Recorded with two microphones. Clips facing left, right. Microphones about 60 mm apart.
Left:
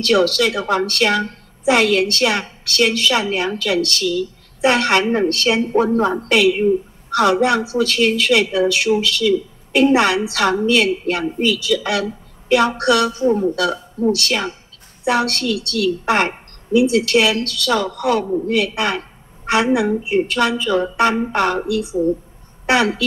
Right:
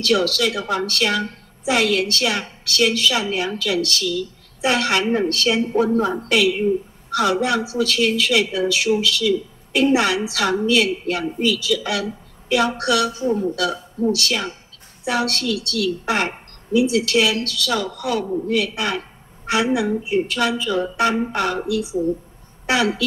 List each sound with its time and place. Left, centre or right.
0.0 s a woman's voice: left
13.2 s speech: left
14.1 s a woman's voice: left